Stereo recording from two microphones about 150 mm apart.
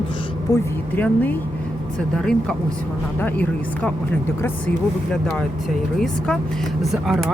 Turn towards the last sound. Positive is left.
turn(degrees=0)  # may be behind; listen again after turning